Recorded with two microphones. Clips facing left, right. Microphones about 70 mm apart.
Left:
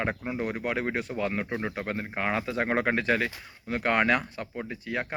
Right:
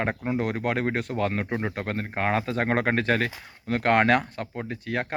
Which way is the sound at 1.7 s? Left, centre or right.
Right.